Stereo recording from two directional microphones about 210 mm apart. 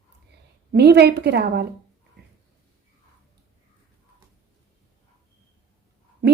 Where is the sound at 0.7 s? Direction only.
50° right (ahead or behind).